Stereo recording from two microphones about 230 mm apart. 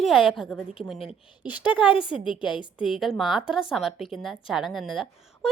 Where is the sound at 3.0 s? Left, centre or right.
Centre.